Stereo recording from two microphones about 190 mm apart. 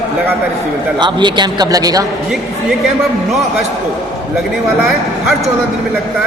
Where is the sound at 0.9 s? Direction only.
25° right (ahead or behind).